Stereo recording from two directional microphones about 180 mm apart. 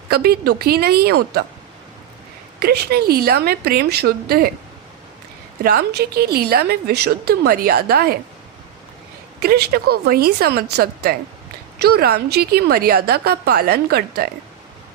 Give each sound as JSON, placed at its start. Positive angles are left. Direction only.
{"t": 0.1, "sound": "a woman's voice", "side_deg": -60}
{"t": 2.6, "sound": "a woman's voice", "side_deg": -60}
{"t": 5.6, "sound": "a woman's voice", "side_deg": -60}
{"t": 9.4, "sound": "a woman's voice", "side_deg": -60}